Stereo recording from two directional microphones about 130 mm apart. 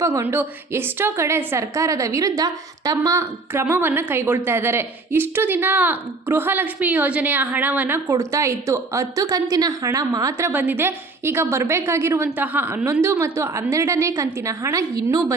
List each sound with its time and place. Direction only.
0.0 s a woman's voice: 20° right (ahead or behind)